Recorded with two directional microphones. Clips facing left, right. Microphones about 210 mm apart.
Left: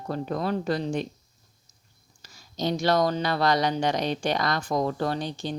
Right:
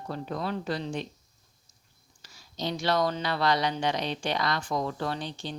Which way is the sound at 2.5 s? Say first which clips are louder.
Left 4 dB; 45° left (ahead or behind).